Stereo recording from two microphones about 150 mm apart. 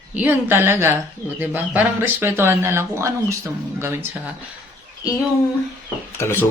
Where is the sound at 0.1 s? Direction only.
10° right (ahead or behind).